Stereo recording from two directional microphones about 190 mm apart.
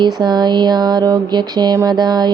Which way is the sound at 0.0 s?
25° right (ahead or behind).